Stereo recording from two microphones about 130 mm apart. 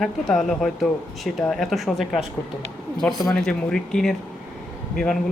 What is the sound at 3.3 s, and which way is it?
Speech, 5° left (ahead or behind).